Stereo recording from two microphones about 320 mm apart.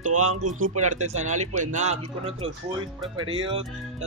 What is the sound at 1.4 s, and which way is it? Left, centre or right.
Speech, right.